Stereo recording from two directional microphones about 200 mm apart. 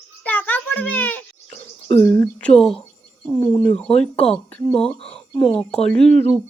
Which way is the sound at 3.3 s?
20° left (ahead or behind).